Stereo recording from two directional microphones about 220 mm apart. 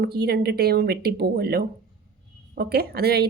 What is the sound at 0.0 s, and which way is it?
A woman's voice, 45° right (ahead or behind).